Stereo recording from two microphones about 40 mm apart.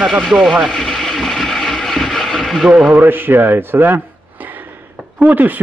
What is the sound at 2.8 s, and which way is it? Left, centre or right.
A man's voice, right.